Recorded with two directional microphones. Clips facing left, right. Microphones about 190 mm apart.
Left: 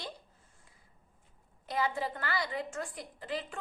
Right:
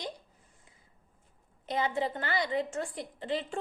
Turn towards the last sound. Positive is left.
turn(degrees=-25)  # may be behind; listen again after turning